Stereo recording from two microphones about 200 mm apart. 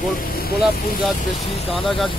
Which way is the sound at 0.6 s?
Centre (ahead or behind).